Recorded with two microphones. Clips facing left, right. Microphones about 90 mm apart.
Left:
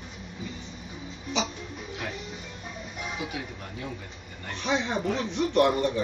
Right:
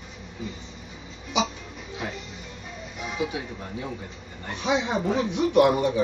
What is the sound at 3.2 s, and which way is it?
Speech, 25° right (ahead or behind).